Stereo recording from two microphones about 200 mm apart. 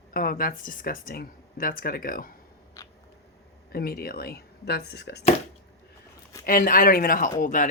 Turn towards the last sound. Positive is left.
turn(degrees=40)  # may be behind; listen again after turning